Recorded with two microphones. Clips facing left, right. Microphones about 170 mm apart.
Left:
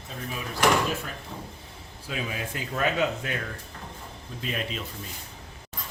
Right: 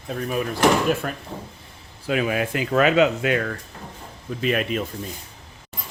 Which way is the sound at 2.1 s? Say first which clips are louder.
Right 11 dB; 70° right (ahead or behind).